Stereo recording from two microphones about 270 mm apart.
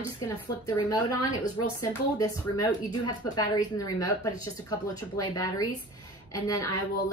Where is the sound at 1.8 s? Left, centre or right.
Centre.